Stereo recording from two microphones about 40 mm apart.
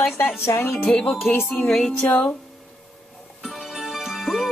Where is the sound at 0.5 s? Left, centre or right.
Left.